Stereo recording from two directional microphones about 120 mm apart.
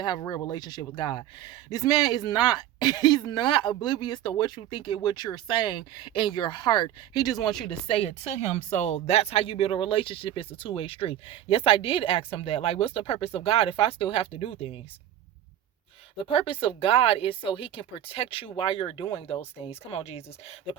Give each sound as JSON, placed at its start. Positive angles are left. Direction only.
{"t": 0.0, "sound": "speech", "side_deg": 35}
{"t": 7.3, "sound": "speech", "side_deg": 0}
{"t": 7.9, "sound": "speech", "side_deg": 55}
{"t": 16.3, "sound": "speech", "side_deg": 45}